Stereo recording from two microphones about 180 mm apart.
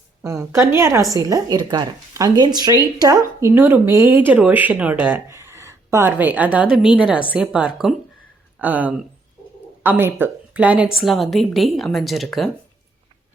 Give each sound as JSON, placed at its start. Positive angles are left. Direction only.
{"t": 0.2, "sound": "a woman's voice", "side_deg": -15}